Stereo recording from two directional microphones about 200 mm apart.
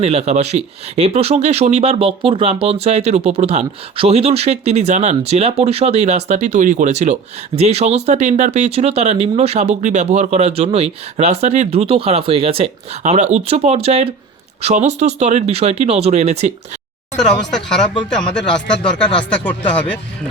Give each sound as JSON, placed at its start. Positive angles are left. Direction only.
{"t": 0.0, "sound": "speech", "side_deg": -30}
{"t": 17.5, "sound": "speech", "side_deg": 5}